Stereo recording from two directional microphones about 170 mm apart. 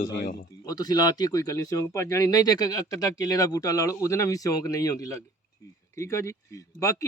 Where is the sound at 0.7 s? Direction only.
20° left (ahead or behind).